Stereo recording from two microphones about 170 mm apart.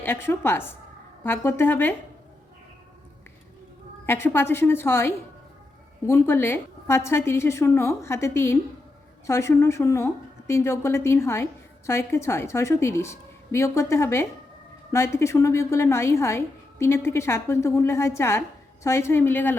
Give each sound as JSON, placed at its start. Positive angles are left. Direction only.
{"t": 0.0, "sound": "a woman's voice", "side_deg": 15}
{"t": 4.0, "sound": "a woman's voice", "side_deg": 15}